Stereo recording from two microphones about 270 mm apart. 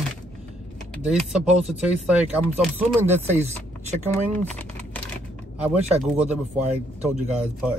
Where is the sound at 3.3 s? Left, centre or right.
Right.